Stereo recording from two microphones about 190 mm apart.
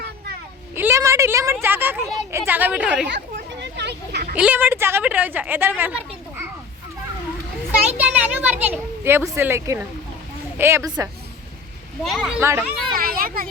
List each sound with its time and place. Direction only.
0.8 s a sound: 15° right (ahead or behind)
1.6 s a woman's voice: 10° right (ahead or behind)
3.1 s a sound: 65° right (ahead or behind)
4.4 s a woman's voice: 10° right (ahead or behind)
7.7 s a woman's voice: 10° right (ahead or behind)
12.0 s a child's voice: centre (ahead or behind)
12.4 s a woman's voice: 15° right (ahead or behind)
13.0 s a child's voice: 50° right (ahead or behind)